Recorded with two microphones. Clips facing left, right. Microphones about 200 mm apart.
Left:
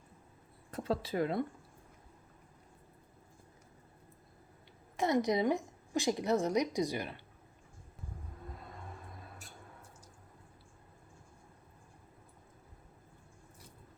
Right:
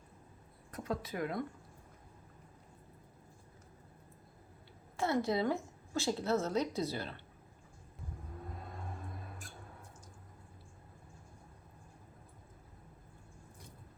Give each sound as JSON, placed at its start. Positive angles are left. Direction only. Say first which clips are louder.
{"t": 0.7, "sound": "speech", "louder": "left 4 dB", "side_deg": 30}
{"t": 4.9, "sound": "a woman's voice", "louder": "left 2 dB", "side_deg": 15}